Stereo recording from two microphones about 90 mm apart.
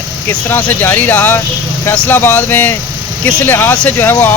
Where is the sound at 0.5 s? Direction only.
25° left (ahead or behind).